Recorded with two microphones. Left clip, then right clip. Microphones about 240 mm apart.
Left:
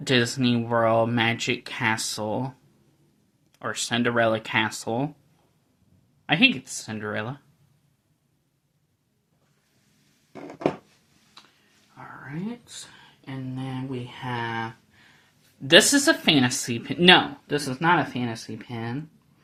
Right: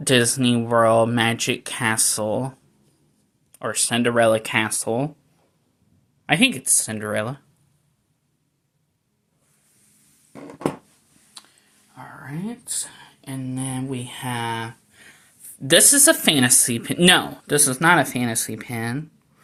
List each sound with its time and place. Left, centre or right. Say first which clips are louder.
0.0 s speech: right 4 dB; centre
6.2 s speech: right 1 dB; right
13.2 s speech: right 5 dB; right
15.6 s speech: right 1 dB; right